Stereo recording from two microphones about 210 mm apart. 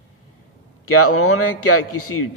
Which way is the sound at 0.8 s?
90° left.